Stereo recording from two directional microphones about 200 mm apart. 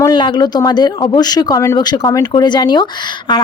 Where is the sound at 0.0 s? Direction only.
20° left (ahead or behind).